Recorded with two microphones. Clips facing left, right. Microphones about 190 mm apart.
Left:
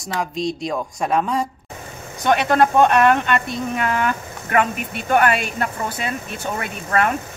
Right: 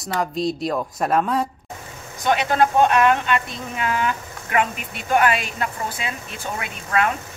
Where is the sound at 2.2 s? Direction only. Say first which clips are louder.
Left 2 dB; 60° left (ahead or behind).